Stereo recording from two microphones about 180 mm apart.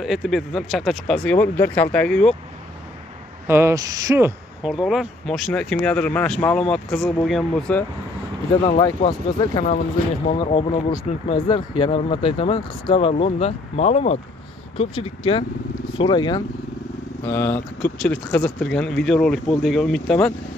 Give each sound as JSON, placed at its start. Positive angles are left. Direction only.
{"t": 0.0, "sound": "speech", "side_deg": 0}
{"t": 3.4, "sound": "speech", "side_deg": -15}
{"t": 4.6, "sound": "speech", "side_deg": -5}
{"t": 9.0, "sound": "speech", "side_deg": 30}
{"t": 17.2, "sound": "speech", "side_deg": 10}